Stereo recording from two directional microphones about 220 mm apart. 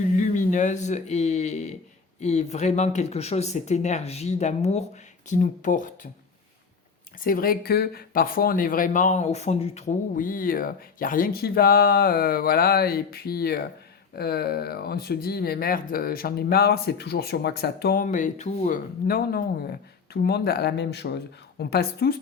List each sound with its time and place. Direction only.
0.2 s speech: 35° left (ahead or behind)
7.2 s speech: 40° left (ahead or behind)
19.0 s speech: 45° left (ahead or behind)